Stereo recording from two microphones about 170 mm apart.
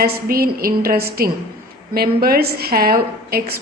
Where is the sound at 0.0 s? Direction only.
60° right (ahead or behind).